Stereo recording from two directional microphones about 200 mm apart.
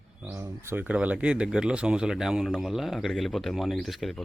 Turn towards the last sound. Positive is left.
turn(degrees=0)  # may be behind; listen again after turning